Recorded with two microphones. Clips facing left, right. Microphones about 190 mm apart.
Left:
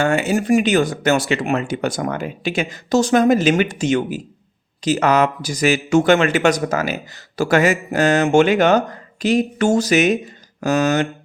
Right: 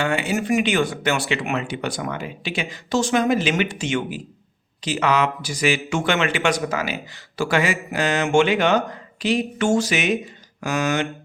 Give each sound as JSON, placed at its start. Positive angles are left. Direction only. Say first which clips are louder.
{"t": 0.0, "sound": "speech", "louder": "left 5 dB", "side_deg": 45}